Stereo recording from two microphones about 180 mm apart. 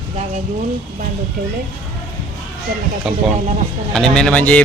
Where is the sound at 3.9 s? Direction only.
5° left (ahead or behind).